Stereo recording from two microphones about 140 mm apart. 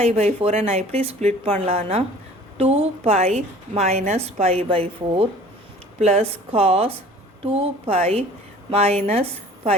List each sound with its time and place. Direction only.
0.0 s a woman's voice: 50° right (ahead or behind)